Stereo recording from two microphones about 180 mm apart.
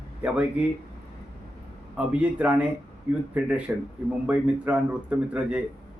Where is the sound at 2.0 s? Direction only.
5° right (ahead or behind).